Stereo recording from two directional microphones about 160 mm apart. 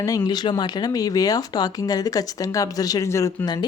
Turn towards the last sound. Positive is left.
turn(degrees=25)  # may be behind; listen again after turning